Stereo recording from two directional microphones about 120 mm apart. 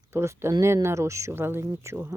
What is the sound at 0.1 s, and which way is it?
Speech, 20° right (ahead or behind).